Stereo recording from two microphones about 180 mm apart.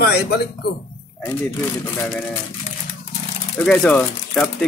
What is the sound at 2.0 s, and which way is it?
Speech, 10° left (ahead or behind).